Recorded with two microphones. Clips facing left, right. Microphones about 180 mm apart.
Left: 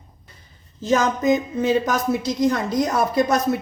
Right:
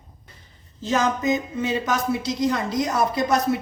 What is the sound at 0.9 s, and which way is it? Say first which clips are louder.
A woman's voice: left 3 dB; 45° left (ahead or behind).